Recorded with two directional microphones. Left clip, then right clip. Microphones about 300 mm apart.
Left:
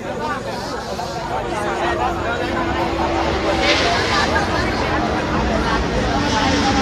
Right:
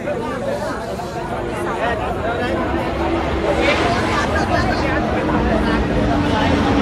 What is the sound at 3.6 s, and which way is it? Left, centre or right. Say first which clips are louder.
Vehicle: left 2 dB; centre.